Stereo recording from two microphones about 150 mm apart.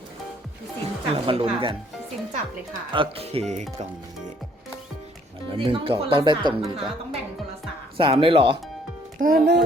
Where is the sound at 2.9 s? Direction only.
35° right (ahead or behind).